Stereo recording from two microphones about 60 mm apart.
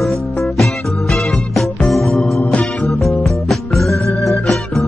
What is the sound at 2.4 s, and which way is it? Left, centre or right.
Music, left.